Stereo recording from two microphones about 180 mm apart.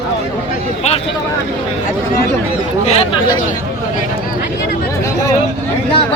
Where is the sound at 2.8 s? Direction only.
35° left (ahead or behind).